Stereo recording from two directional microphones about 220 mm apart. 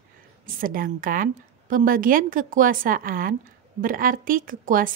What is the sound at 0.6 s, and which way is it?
A woman's voice, 40° right (ahead or behind).